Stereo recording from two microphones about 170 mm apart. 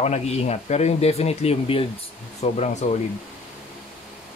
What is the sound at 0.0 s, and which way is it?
Speech, 40° left (ahead or behind).